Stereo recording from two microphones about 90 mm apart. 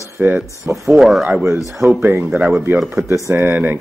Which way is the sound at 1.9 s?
20° right (ahead or behind).